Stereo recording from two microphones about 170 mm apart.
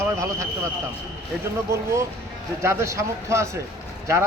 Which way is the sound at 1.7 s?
15° right (ahead or behind).